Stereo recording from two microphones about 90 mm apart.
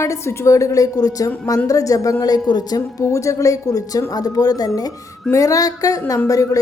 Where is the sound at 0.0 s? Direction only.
30° left (ahead or behind).